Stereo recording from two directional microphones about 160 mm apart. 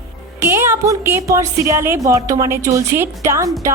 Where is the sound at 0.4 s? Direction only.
15° right (ahead or behind).